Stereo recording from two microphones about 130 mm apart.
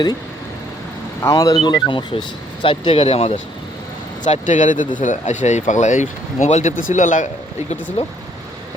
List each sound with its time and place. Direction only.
1.2 s speech: 25° left (ahead or behind); by 3.3 s 50° left (ahead or behind)
4.2 s speech: 70° left (ahead or behind)
8.0 s speech: 50° left (ahead or behind)